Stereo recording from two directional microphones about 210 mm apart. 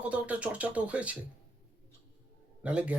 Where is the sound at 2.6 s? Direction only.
5° right (ahead or behind).